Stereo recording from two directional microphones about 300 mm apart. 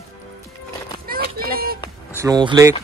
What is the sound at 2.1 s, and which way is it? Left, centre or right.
Speech, centre.